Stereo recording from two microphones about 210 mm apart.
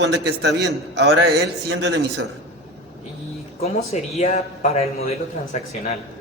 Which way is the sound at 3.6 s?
30° left (ahead or behind).